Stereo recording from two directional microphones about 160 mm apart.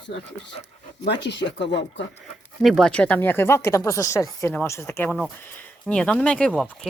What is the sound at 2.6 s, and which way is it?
Speech, centre (ahead or behind).